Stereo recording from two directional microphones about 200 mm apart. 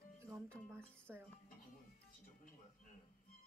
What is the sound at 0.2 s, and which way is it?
Music, 15° right (ahead or behind).